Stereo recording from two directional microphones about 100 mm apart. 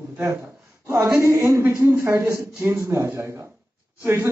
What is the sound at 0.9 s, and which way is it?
A man's voice, 30° right (ahead or behind).